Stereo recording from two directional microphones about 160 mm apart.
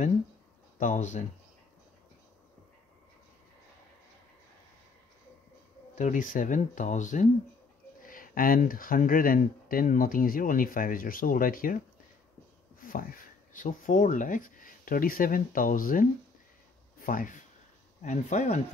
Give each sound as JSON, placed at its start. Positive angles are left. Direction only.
{"t": 0.7, "sound": "speech", "side_deg": 50}
{"t": 5.9, "sound": "speech", "side_deg": 55}
{"t": 12.8, "sound": "speech", "side_deg": 60}
{"t": 18.0, "sound": "speech", "side_deg": 50}